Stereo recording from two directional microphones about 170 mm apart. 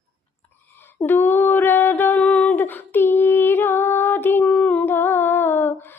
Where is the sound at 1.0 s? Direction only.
10° left (ahead or behind).